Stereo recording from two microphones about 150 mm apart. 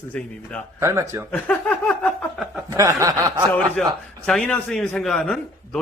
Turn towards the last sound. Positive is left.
turn(degrees=5)  # may be behind; listen again after turning